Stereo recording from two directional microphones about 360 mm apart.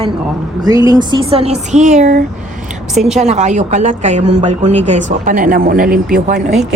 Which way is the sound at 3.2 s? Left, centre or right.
Centre.